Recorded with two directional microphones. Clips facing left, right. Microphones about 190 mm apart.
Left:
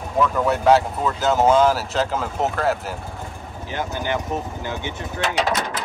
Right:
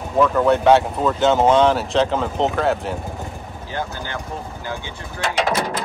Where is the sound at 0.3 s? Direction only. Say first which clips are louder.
Right 2 dB; centre (ahead or behind).